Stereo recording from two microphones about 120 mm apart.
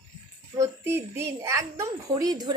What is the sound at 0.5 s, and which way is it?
A child's voice, 25° right (ahead or behind).